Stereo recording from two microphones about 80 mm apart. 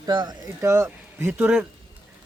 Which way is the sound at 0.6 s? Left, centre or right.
Right.